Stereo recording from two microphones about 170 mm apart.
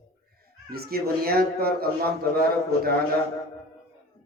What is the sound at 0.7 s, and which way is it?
A man's voice, 65° right (ahead or behind).